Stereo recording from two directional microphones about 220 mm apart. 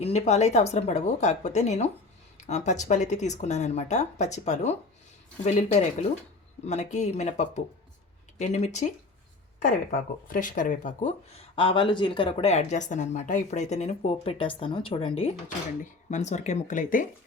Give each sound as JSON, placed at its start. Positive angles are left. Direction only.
{"t": 0.0, "sound": "speech", "side_deg": 30}
{"t": 10.2, "sound": "speech", "side_deg": 40}